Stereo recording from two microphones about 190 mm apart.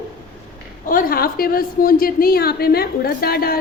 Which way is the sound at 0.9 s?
50° left (ahead or behind).